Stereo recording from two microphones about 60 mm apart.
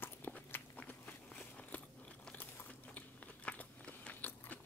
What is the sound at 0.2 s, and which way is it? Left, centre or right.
Walk, left.